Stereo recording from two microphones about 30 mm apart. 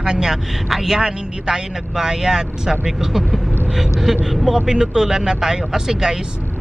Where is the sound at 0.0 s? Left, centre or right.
Right.